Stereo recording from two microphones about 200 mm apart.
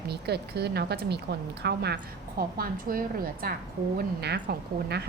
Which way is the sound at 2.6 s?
45° right (ahead or behind).